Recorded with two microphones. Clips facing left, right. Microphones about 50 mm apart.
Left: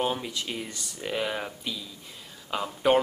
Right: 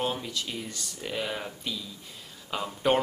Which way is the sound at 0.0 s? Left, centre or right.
Centre.